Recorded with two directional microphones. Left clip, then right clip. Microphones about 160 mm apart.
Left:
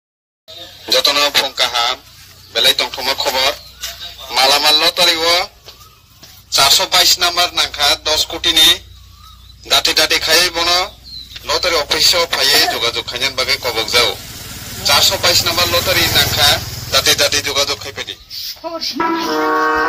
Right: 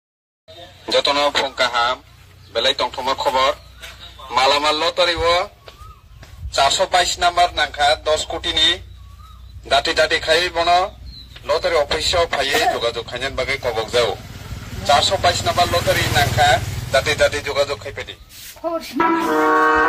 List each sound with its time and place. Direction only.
0.5 s speech: 15° left (ahead or behind)
6.5 s a man's voice: 25° left (ahead or behind); by 18.1 s 40° left (ahead or behind)
18.6 s music: 5° left (ahead or behind)